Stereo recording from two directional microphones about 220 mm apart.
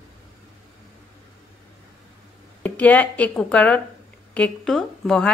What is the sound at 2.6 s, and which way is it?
Speech, 5° left (ahead or behind).